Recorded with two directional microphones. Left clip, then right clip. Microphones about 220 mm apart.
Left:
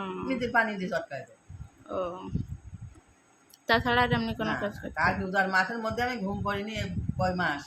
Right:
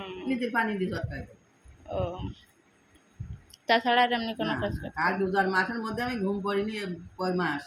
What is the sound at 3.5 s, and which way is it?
Speech, 10° left (ahead or behind).